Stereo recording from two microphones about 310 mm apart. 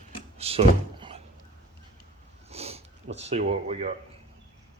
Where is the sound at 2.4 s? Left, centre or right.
Centre.